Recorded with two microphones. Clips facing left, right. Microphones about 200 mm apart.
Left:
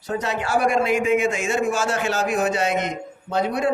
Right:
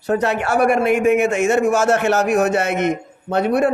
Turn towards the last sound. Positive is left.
turn(degrees=-65)  # may be behind; listen again after turning